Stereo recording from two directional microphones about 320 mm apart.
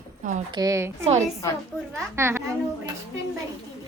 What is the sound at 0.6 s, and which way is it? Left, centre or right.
Speech, centre.